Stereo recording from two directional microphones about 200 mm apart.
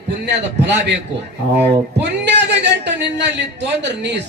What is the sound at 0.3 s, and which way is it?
A man's voice, 60° right (ahead or behind).